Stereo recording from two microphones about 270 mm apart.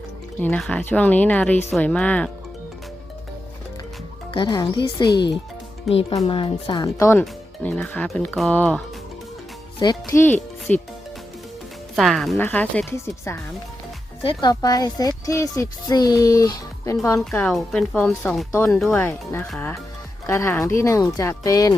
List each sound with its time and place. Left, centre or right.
0.3 s speech: centre
4.4 s speech: centre
9.8 s speech: centre
11.9 s speech: centre